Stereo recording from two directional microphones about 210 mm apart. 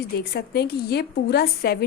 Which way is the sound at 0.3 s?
50° left (ahead or behind).